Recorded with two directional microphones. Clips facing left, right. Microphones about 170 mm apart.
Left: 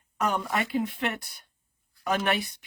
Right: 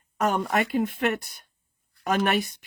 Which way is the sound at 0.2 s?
50° right (ahead or behind).